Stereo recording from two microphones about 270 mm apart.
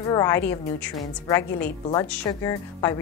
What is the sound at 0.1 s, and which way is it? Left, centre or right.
Speech, centre.